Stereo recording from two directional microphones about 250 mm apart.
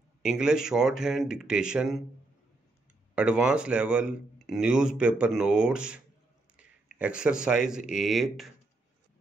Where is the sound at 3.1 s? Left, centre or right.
Centre.